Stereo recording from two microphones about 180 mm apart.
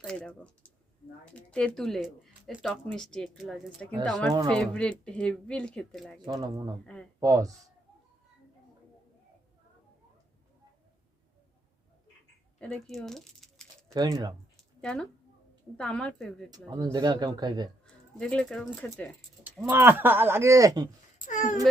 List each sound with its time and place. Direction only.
0.0 s speech: 5° left (ahead or behind)
6.2 s speech: 20° right (ahead or behind)
12.5 s speech: 5° left (ahead or behind)
13.9 s speech: 20° right (ahead or behind)
14.5 s a sound: centre (ahead or behind)
15.8 s speech: 5° left (ahead or behind)
16.5 s speech: 20° right (ahead or behind)
18.2 s speech: 5° left (ahead or behind)
19.6 s speech: 10° right (ahead or behind)
21.2 s speech: 45° left (ahead or behind)